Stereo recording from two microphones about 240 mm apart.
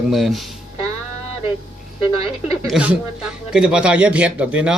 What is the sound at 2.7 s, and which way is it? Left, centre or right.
Speech, centre.